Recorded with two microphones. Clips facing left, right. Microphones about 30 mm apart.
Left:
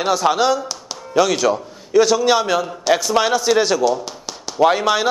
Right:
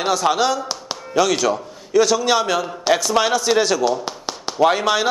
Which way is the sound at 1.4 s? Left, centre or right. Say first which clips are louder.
Left 2 dB; centre.